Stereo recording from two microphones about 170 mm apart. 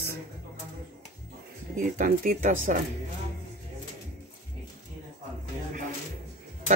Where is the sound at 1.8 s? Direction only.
50° right (ahead or behind).